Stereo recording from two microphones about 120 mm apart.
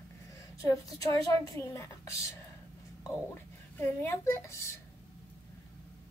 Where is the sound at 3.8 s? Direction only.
20° left (ahead or behind).